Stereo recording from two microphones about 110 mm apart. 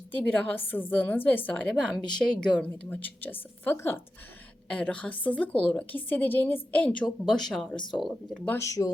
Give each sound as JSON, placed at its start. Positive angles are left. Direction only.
{"t": 0.1, "sound": "a woman's voice", "side_deg": 15}
{"t": 8.4, "sound": "speech", "side_deg": 25}